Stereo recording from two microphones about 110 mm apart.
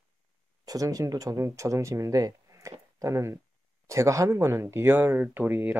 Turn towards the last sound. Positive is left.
turn(degrees=-20)  # may be behind; listen again after turning